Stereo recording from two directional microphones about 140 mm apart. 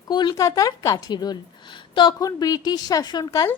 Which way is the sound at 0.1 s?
30° left (ahead or behind).